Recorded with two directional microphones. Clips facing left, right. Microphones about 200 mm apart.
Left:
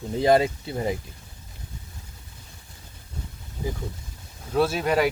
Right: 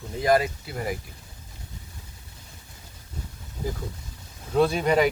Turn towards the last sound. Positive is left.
turn(degrees=5)  # may be behind; listen again after turning